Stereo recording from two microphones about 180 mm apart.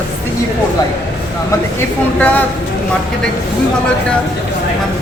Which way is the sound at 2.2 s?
10° left (ahead or behind).